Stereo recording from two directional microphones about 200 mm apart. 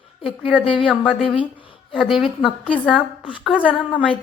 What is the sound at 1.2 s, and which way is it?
Speech, 25° left (ahead or behind).